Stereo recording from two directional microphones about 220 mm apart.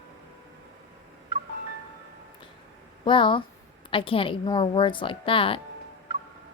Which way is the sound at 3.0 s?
20° left (ahead or behind).